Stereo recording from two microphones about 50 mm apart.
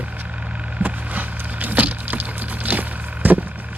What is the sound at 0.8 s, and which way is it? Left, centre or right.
Vehicle, right.